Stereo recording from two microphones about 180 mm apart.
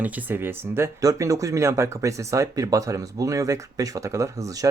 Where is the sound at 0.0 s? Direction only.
10° right (ahead or behind).